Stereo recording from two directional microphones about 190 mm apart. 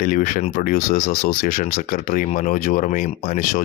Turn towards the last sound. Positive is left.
turn(degrees=40)  # may be behind; listen again after turning